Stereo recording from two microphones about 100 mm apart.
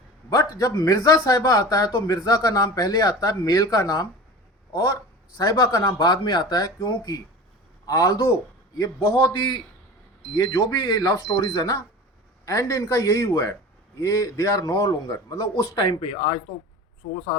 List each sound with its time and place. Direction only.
0.3 s speech: 35° left (ahead or behind)
9.1 s speech: 50° left (ahead or behind)
16.0 s speech: 70° left (ahead or behind)